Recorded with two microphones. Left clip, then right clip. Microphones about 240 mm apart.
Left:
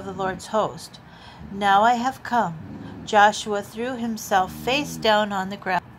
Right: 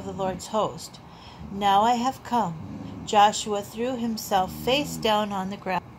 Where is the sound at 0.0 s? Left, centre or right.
Left.